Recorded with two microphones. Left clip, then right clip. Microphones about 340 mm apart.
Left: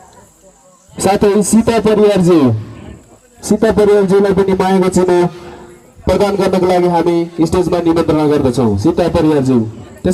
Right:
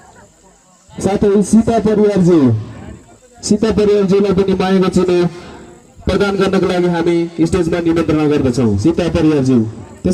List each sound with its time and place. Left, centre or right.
0.9 s a man's voice: left; by 9.6 s centre